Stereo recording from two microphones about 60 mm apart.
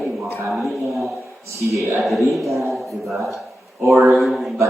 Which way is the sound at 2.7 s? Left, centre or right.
Centre.